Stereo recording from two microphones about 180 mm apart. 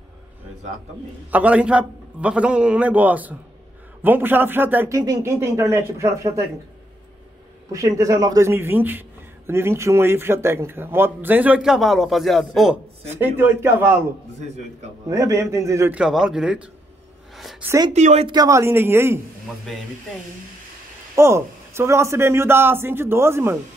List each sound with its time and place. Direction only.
1.3 s a man's voice: 10° right (ahead or behind)
7.7 s a man's voice: 20° right (ahead or behind); by 12.7 s centre (ahead or behind)
13.2 s a man's voice: 10° right (ahead or behind)
15.0 s a man's voice: 15° right (ahead or behind)
17.4 s a sound: centre (ahead or behind)
17.6 s speech: 20° right (ahead or behind)
17.9 s speech: 40° right (ahead or behind)
18.3 s a man's voice: 20° right (ahead or behind)
21.1 s a man's voice: 15° right (ahead or behind)